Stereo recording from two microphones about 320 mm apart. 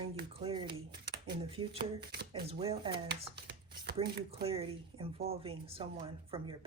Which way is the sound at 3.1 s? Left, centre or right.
Right.